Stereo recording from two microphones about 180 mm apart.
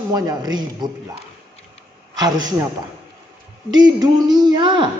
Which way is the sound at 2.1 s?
20° right (ahead or behind).